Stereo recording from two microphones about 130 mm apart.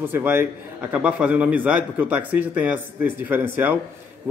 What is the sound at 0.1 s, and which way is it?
A man's voice, 15° right (ahead or behind).